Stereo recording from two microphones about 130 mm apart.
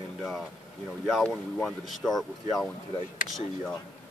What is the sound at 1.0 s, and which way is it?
Speech, centre (ahead or behind).